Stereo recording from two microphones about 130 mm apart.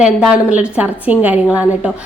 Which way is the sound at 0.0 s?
5° right (ahead or behind).